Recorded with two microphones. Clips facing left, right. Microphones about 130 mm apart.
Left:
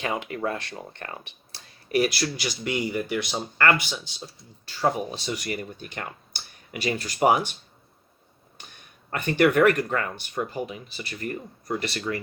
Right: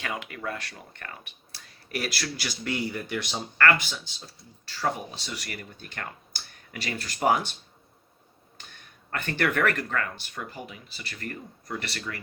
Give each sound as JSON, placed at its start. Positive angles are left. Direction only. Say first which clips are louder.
{"t": 0.0, "sound": "speech", "louder": "left 6 dB", "side_deg": 25}
{"t": 9.0, "sound": "speech", "louder": "left 7 dB", "side_deg": 15}